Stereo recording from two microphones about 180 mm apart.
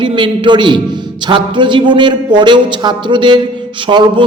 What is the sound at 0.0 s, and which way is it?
A man's voice, 25° right (ahead or behind).